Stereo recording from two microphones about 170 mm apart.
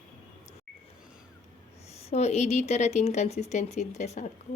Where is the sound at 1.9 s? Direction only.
40° left (ahead or behind).